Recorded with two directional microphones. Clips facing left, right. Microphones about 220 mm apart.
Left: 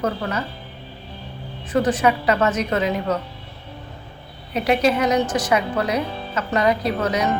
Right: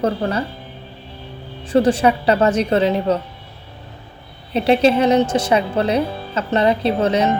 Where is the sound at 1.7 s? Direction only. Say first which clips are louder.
Right 4 dB; 30° right (ahead or behind).